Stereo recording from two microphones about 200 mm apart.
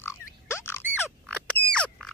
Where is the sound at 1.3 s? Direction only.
5° left (ahead or behind).